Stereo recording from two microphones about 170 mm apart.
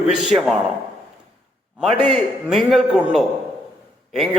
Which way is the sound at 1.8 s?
Centre (ahead or behind).